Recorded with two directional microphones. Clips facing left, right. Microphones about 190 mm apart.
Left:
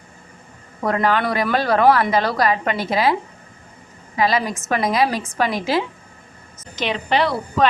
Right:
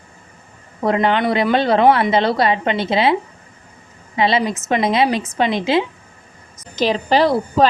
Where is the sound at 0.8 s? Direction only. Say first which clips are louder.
Right 3 dB; 20° right (ahead or behind).